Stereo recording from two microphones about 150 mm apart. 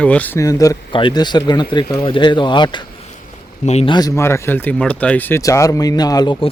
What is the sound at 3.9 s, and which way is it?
Speech, 25° left (ahead or behind).